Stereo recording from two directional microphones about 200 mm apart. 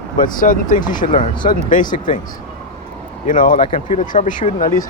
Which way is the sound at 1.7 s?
40° left (ahead or behind).